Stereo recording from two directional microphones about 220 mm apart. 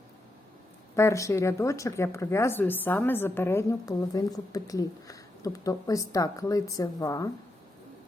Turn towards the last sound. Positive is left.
turn(degrees=15)  # may be behind; listen again after turning